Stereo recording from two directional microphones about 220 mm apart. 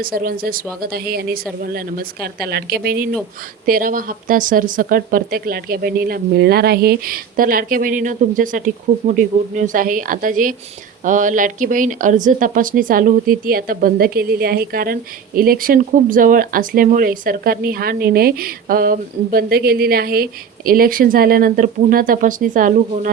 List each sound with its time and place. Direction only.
0.0 s speech: 40° right (ahead or behind)